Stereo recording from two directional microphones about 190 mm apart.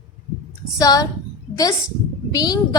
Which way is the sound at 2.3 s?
20° left (ahead or behind).